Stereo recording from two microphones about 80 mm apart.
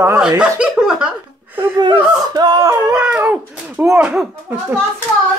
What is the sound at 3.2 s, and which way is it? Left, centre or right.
Speech, right.